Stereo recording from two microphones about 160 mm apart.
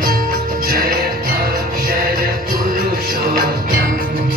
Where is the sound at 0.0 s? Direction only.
65° right (ahead or behind).